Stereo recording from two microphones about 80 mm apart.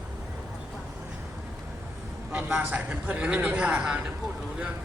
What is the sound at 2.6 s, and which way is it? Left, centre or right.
A man's voice, centre.